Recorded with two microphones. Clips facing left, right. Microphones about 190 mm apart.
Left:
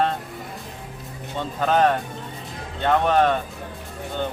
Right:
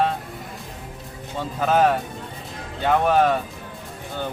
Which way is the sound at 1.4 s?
5° right (ahead or behind).